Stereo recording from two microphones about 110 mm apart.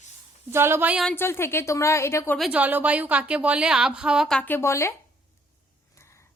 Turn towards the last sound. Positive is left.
turn(degrees=25)  # may be behind; listen again after turning